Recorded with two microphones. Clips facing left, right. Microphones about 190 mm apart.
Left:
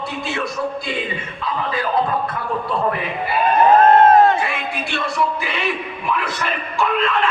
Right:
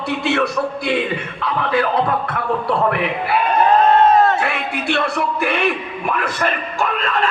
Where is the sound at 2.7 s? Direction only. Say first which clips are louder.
Right 3 dB; 70° right (ahead or behind).